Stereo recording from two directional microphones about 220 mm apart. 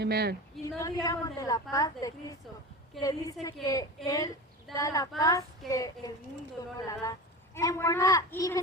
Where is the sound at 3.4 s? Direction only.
15° left (ahead or behind).